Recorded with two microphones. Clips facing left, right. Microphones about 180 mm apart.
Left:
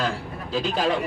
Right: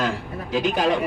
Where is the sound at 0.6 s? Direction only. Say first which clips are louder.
Right 3 dB; 15° right (ahead or behind).